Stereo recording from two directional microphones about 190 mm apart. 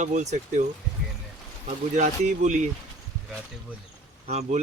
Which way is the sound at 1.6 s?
40° right (ahead or behind).